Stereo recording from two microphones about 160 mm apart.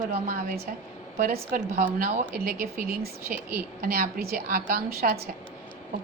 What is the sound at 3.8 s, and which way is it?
A woman's voice, 65° right (ahead or behind).